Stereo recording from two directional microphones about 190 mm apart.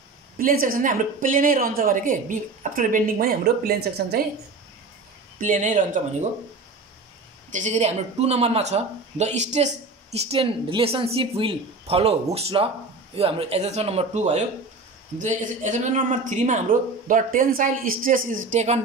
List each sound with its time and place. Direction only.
0.4 s a woman's voice: 50° right (ahead or behind)
5.4 s a woman's voice: 40° right (ahead or behind)
7.5 s a woman's voice: 40° right (ahead or behind)